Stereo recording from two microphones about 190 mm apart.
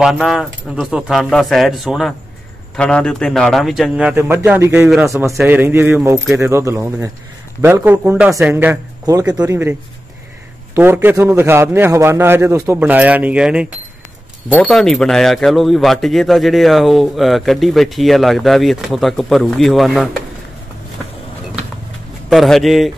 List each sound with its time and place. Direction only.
0.0 s a man's voice: 5° right (ahead or behind)
22.3 s speech: centre (ahead or behind)